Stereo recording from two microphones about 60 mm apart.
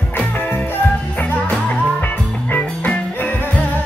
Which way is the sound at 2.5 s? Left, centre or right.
Left.